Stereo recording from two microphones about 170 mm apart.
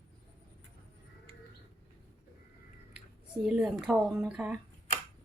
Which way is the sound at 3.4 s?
5° right (ahead or behind).